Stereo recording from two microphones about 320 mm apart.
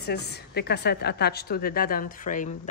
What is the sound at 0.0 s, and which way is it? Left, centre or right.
A woman's voice, left.